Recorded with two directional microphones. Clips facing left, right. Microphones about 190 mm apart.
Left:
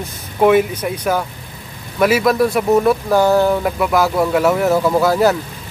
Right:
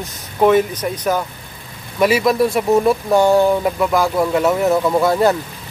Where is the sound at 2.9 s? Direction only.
Centre (ahead or behind).